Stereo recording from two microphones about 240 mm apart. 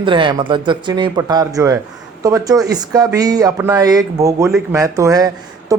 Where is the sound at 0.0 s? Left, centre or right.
Right.